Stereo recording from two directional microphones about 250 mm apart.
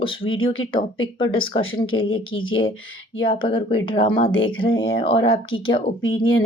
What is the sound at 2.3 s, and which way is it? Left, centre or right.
Speech, left.